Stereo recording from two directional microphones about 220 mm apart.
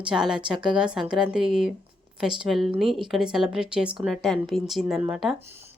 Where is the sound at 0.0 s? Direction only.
5° right (ahead or behind).